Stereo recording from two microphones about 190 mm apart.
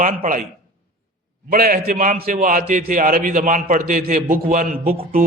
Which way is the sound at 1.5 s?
50° right (ahead or behind).